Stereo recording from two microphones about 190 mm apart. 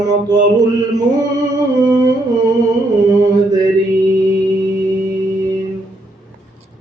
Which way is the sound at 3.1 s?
20° right (ahead or behind).